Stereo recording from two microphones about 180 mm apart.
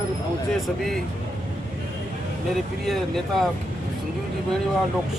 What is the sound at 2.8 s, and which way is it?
Speech, centre (ahead or behind).